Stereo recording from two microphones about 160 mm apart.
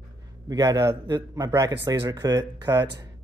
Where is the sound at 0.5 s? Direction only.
25° right (ahead or behind).